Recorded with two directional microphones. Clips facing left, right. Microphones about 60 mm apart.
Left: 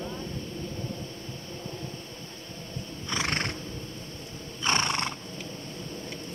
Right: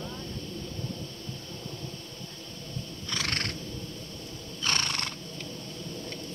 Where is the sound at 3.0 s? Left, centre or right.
Left.